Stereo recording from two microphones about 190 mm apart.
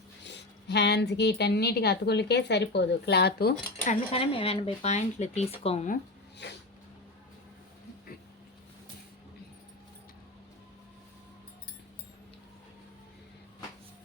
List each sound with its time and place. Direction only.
0.3 s a woman's voice: 65° left (ahead or behind)
3.8 s speech: 30° left (ahead or behind)
6.4 s a woman's voice: 65° left (ahead or behind)